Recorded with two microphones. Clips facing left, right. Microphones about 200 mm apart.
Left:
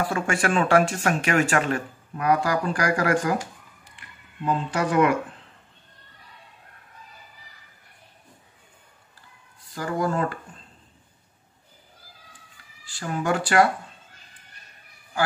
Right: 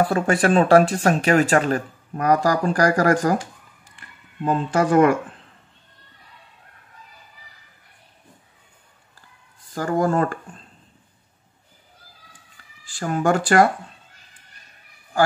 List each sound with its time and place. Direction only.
0.0 s speech: 35° right (ahead or behind)
4.5 s speech: 45° right (ahead or behind)
9.8 s speech: 50° right (ahead or behind)
12.8 s speech: 45° right (ahead or behind)